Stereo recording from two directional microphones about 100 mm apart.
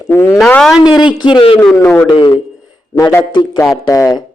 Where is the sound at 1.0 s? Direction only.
50° left (ahead or behind).